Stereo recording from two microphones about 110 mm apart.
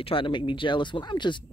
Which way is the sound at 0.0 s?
50° left (ahead or behind).